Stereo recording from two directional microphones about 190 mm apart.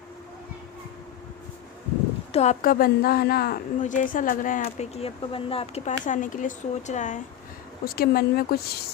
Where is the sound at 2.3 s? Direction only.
35° left (ahead or behind).